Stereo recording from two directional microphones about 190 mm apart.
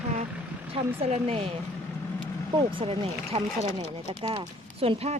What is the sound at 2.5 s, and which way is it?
Speech, 30° right (ahead or behind).